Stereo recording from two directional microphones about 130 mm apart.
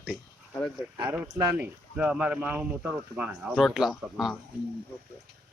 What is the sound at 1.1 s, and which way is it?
Speech, 15° right (ahead or behind).